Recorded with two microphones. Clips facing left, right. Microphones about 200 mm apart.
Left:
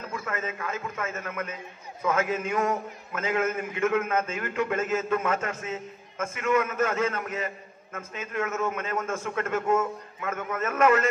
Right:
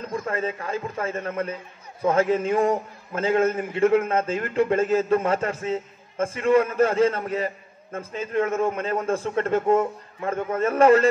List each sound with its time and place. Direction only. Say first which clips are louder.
0.1 s a man's voice: right 7 dB; 35° right (ahead or behind)